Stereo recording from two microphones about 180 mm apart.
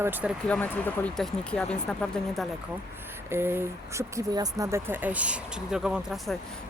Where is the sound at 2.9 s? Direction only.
10° right (ahead or behind).